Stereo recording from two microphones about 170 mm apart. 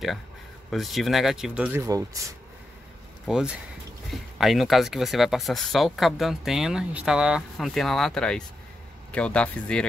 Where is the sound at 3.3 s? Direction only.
5° right (ahead or behind).